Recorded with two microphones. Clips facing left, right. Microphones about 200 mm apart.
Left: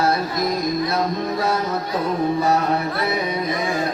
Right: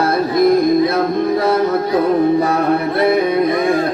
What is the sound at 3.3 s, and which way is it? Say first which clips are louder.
Music: right 9 dB; 55° right (ahead or behind).